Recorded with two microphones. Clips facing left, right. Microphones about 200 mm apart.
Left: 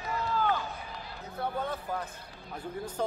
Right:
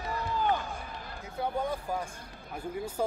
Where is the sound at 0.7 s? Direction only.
50° right (ahead or behind).